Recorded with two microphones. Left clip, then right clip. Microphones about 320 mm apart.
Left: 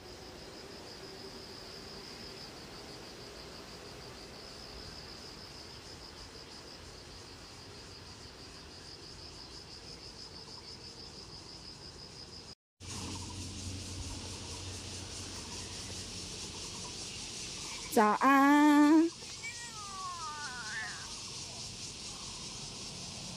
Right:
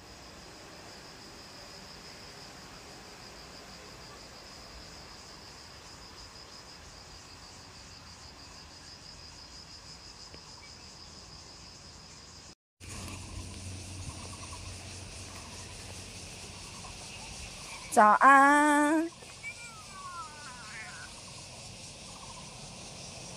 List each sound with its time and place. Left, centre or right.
17.9 s female singing: centre